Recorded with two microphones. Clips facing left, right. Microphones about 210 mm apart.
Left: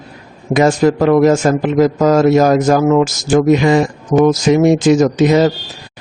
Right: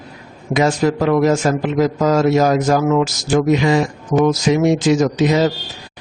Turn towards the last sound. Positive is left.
turn(degrees=50)  # may be behind; listen again after turning